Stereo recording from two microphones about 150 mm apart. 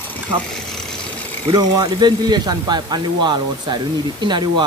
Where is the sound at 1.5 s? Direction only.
25° right (ahead or behind).